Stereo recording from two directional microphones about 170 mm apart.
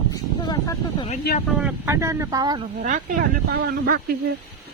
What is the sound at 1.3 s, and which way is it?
Speech, 70° left (ahead or behind).